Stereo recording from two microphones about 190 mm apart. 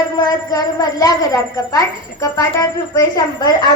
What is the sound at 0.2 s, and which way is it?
A woman's voice, 20° left (ahead or behind).